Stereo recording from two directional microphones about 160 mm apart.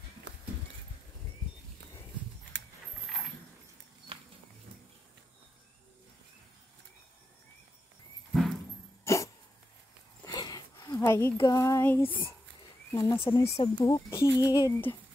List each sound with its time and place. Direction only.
4.1 s a sound: 35° right (ahead or behind)
8.3 s horse: centre (ahead or behind)
9.0 s dog: 20° left (ahead or behind)
10.2 s a sound: 25° left (ahead or behind)
12.9 s speech: 20° left (ahead or behind)
13.2 s speech: 35° left (ahead or behind)
13.8 s speech: 20° left (ahead or behind)